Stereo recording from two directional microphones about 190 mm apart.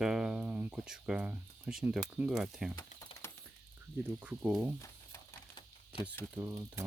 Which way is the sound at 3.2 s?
15° left (ahead or behind).